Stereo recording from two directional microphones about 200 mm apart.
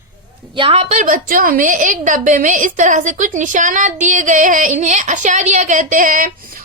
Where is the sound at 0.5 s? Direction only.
25° right (ahead or behind).